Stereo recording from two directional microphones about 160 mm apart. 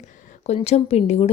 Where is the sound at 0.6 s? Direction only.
40° left (ahead or behind).